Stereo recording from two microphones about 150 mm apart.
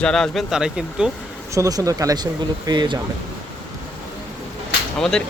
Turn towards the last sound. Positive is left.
turn(degrees=5)  # may be behind; listen again after turning